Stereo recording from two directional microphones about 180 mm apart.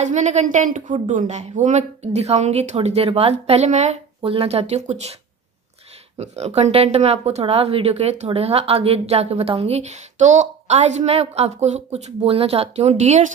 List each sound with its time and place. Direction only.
0.0 s speech: 40° right (ahead or behind)
6.1 s speech: 35° right (ahead or behind)